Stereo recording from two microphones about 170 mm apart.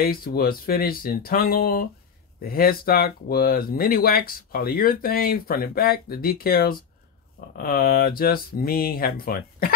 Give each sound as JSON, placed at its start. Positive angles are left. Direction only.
{"t": 0.0, "sound": "speech", "side_deg": 60}